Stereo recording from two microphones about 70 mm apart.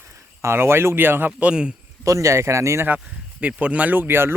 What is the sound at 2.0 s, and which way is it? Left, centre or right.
Speech, right.